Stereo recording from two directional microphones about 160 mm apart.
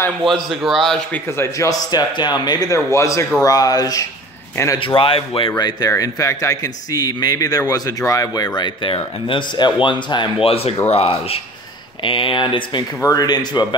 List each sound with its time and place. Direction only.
0.2 s a man's voice: centre (ahead or behind)
1.2 s speech: 15° left (ahead or behind)